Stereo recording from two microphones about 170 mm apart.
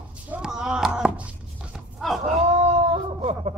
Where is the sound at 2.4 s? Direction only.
40° right (ahead or behind).